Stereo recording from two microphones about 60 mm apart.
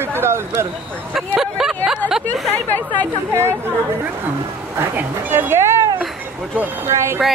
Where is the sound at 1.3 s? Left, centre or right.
Centre.